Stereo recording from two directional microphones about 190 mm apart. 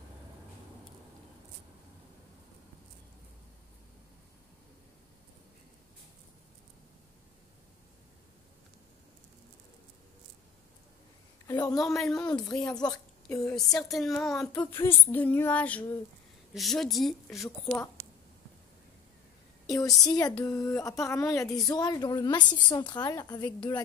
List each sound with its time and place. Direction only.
11.4 s a woman's voice: 20° left (ahead or behind)
11.8 s a woman's voice: centre (ahead or behind)
12.3 s a woman's voice: 20° left (ahead or behind)
13.3 s a woman's voice: 5° left (ahead or behind)
13.8 s child singing: centre (ahead or behind)
16.5 s a woman's voice: centre (ahead or behind)
19.6 s a woman's voice: 20° left (ahead or behind)
20.1 s child singing: 20° left (ahead or behind)
21.6 s a woman's voice: 20° left (ahead or behind)